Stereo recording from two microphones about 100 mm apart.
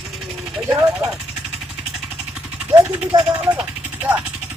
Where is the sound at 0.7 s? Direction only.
30° right (ahead or behind).